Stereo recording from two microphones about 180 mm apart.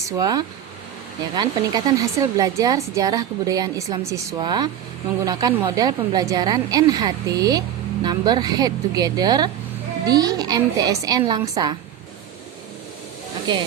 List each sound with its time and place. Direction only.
0.2 s speech: 20° right (ahead or behind)
13.5 s speech: 25° right (ahead or behind)